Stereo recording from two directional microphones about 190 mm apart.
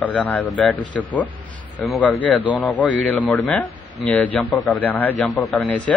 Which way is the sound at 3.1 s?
10° left (ahead or behind).